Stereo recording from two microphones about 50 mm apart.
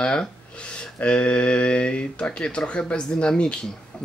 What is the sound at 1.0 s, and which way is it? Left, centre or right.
Speech, left.